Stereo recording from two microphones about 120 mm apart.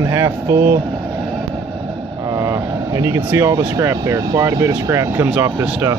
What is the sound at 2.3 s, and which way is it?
Vehicle, 30° right (ahead or behind).